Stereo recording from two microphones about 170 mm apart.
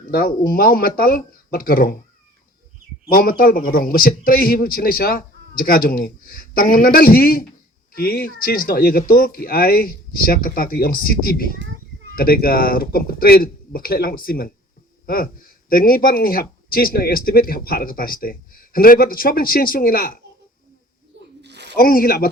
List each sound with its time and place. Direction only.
0.0 s speech: 60° left (ahead or behind)
3.1 s speech: 60° left (ahead or behind)
21.4 s a sound: 90° right
21.8 s speech: 60° left (ahead or behind)